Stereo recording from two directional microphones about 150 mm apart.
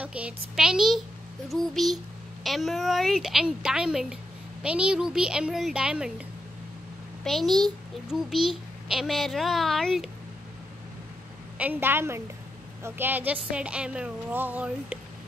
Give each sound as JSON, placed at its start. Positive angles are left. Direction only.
{"t": 0.0, "sound": "a child's voice", "side_deg": -10}
{"t": 7.2, "sound": "a child's voice", "side_deg": 0}
{"t": 11.5, "sound": "a woman's voice", "side_deg": -10}